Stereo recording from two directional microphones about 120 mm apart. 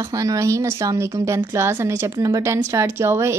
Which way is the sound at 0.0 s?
30° right (ahead or behind).